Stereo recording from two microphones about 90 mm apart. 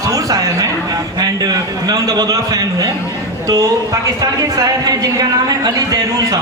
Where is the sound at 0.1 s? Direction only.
40° right (ahead or behind).